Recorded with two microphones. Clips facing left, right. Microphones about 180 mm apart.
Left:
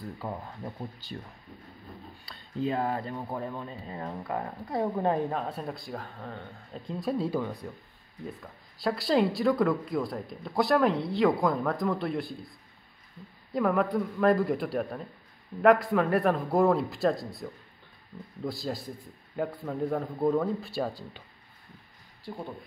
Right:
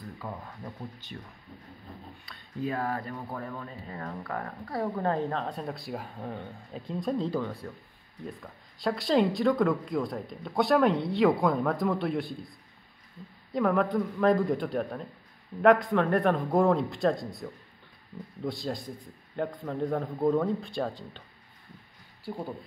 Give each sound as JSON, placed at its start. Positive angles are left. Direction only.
{"t": 0.2, "sound": "speech", "side_deg": 30}
{"t": 2.2, "sound": "speech", "side_deg": 25}
{"t": 13.5, "sound": "speech", "side_deg": 0}
{"t": 22.3, "sound": "speech", "side_deg": -5}